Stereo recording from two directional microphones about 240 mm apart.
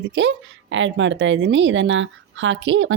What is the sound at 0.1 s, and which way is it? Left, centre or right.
A woman's voice, right.